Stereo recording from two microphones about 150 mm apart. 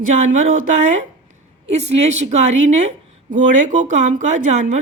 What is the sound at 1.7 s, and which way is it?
A woman's voice, 45° right (ahead or behind).